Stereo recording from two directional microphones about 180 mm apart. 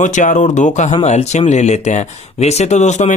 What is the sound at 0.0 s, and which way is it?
Speech, 45° left (ahead or behind).